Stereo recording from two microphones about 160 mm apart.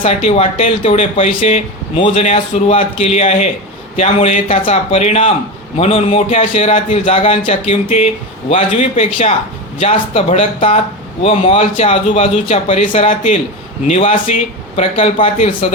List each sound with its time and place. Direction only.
0.0 s speech: 40° left (ahead or behind)